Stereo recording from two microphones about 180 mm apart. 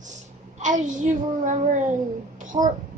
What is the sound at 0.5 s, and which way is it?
A woman's voice, 45° right (ahead or behind).